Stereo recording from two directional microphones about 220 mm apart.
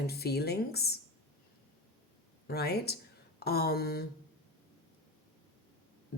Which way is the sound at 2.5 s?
45° left (ahead or behind).